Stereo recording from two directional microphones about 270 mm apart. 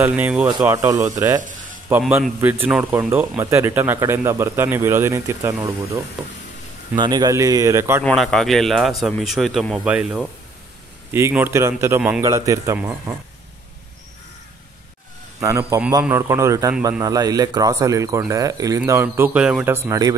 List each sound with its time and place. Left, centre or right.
0.0 s a man's voice: centre
8.0 s a man's voice: centre
15.4 s a man's voice: centre